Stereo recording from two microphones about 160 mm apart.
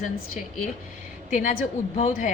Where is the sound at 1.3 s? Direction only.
55° left (ahead or behind).